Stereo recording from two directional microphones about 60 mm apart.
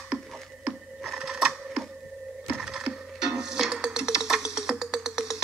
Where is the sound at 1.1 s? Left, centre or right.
Centre.